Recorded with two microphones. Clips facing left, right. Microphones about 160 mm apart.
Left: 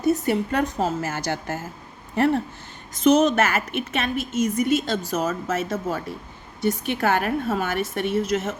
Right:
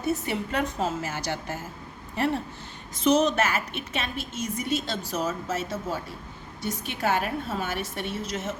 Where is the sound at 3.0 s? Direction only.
50° left (ahead or behind).